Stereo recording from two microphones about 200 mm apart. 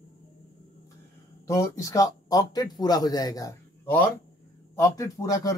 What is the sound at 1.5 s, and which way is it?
A man's voice, 15° left (ahead or behind).